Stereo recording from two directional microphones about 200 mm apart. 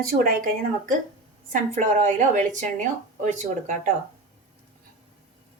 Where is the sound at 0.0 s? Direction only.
45° right (ahead or behind).